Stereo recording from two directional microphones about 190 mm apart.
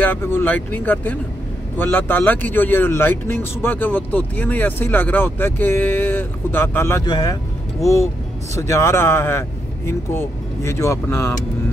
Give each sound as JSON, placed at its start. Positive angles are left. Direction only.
{"t": 0.0, "sound": "speech", "side_deg": 10}